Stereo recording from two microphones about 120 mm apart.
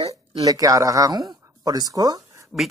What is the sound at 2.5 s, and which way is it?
Speech, 5° right (ahead or behind).